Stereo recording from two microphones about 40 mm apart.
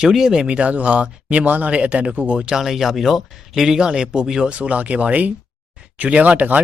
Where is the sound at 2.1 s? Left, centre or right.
Right.